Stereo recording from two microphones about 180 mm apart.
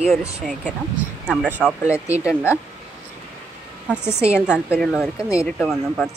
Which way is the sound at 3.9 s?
5° right (ahead or behind).